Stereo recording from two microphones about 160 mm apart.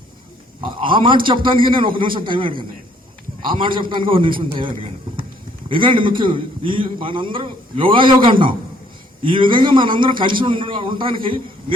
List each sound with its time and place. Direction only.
0.6 s a man's voice: 30° right (ahead or behind)